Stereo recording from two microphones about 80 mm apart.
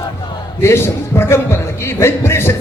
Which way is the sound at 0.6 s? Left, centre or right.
Left.